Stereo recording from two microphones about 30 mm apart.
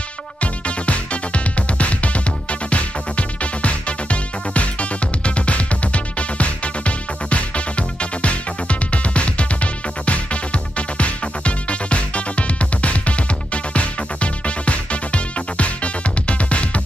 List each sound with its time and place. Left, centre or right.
0.4 s music: left